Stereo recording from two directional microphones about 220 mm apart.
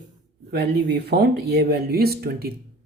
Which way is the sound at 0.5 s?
45° right (ahead or behind).